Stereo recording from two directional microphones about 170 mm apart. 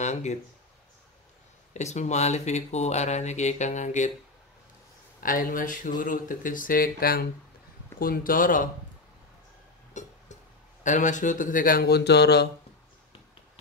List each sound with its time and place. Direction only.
0.0 s speech: 45° left (ahead or behind)
1.7 s speech: 45° left (ahead or behind)
5.2 s speech: 55° left (ahead or behind)
9.9 s music: 45° left (ahead or behind)
10.8 s speech: 45° left (ahead or behind); by 12.4 s 80° left